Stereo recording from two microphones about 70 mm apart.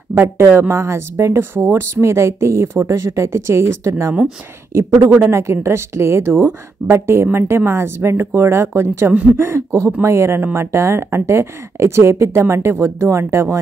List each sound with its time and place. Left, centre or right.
0.1 s speech: right
5.2 s speech: right